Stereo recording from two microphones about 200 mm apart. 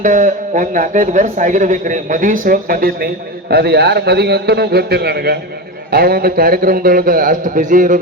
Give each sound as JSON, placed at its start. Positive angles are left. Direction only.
{"t": 0.0, "sound": "a man's voice", "side_deg": -40}